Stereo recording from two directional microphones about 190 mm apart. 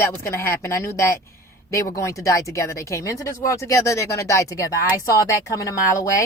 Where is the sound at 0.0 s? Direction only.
15° left (ahead or behind).